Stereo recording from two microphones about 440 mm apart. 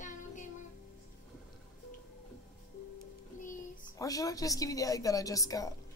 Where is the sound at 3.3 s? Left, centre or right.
Centre.